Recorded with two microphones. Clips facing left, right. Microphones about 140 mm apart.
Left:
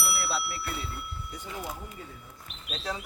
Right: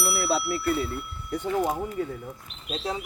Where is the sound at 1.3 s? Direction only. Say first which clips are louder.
Right 14 dB; 60° right (ahead or behind).